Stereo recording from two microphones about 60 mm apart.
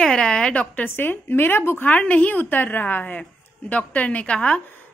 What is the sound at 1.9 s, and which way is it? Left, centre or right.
Speech, left.